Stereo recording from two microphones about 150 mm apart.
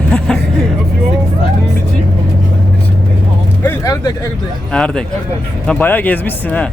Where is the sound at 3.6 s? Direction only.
15° left (ahead or behind).